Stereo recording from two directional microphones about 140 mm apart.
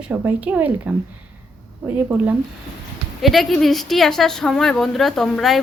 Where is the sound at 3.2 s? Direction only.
Centre (ahead or behind).